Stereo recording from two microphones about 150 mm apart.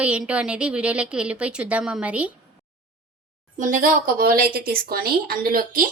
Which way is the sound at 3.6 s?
60° right (ahead or behind).